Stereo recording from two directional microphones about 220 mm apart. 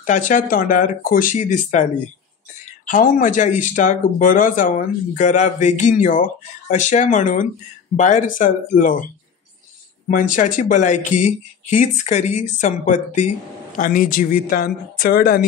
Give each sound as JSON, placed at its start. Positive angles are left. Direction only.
{"t": 0.0, "sound": "speech", "side_deg": 35}
{"t": 2.9, "sound": "speech", "side_deg": 40}
{"t": 10.0, "sound": "speech", "side_deg": 35}